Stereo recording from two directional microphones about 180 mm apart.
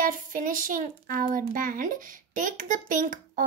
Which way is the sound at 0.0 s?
50° right (ahead or behind).